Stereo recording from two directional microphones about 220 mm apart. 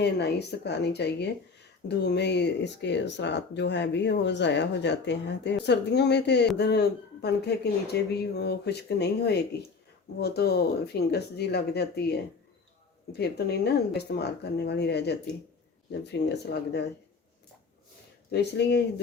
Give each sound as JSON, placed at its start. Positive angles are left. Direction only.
{"t": 0.0, "sound": "speech", "side_deg": 50}
{"t": 18.3, "sound": "speech", "side_deg": 50}